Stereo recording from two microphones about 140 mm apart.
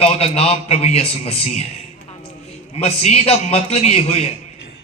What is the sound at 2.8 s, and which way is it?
A man's voice, 50° left (ahead or behind).